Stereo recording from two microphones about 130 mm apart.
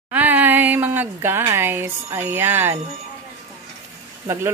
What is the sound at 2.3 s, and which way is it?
Speech, 15° right (ahead or behind).